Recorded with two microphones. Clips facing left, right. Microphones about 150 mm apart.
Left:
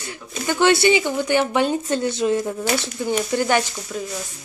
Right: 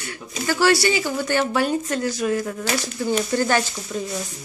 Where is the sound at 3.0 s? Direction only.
15° left (ahead or behind).